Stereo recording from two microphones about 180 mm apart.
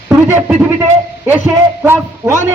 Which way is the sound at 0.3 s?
10° right (ahead or behind).